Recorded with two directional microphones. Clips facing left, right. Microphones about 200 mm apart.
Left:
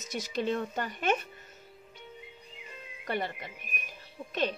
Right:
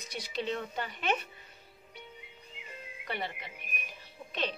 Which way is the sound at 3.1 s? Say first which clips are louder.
Left 5 dB; 45° left (ahead or behind).